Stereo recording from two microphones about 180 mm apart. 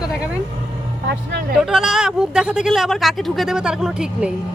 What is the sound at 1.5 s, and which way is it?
Speech, 5° right (ahead or behind).